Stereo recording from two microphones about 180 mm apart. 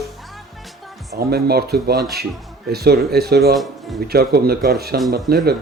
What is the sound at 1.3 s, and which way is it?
Speech, 60° right (ahead or behind).